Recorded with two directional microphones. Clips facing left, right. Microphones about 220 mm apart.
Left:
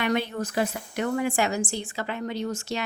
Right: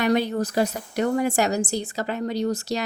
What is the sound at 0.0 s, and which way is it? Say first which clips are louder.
A woman's voice: right 5 dB; 40° right (ahead or behind).